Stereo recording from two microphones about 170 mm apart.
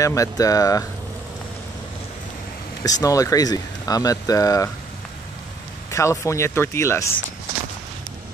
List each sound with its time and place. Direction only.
0.0 s speech: 20° left (ahead or behind)
2.8 s speech: 20° left (ahead or behind)
5.9 s speech: 15° left (ahead or behind)